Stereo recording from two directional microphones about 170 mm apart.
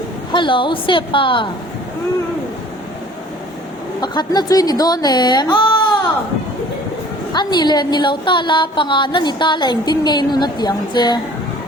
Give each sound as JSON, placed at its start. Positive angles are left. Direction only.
{"t": 0.3, "sound": "a woman's voice", "side_deg": 30}
{"t": 4.0, "sound": "a woman's voice", "side_deg": 25}
{"t": 7.3, "sound": "a woman's voice", "side_deg": 25}